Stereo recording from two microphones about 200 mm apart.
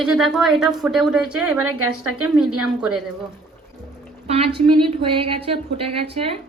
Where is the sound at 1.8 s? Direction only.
90° right.